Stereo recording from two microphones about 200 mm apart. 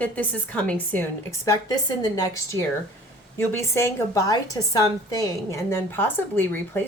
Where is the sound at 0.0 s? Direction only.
10° left (ahead or behind).